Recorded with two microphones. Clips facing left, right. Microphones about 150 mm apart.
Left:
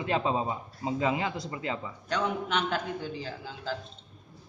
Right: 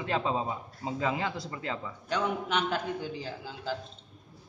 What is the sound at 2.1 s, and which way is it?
A man's voice, 10° right (ahead or behind).